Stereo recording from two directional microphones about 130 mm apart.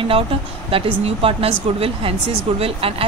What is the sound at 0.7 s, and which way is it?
A woman's voice, 45° right (ahead or behind).